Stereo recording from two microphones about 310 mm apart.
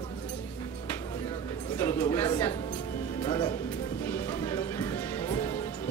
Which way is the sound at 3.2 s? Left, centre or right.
Centre.